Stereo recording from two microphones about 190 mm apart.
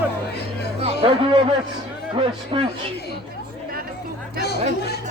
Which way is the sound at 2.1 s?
30° right (ahead or behind).